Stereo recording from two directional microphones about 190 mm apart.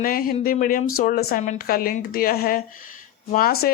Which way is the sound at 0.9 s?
50° left (ahead or behind).